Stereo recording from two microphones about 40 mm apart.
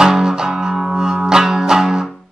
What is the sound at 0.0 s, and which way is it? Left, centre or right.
Music, centre.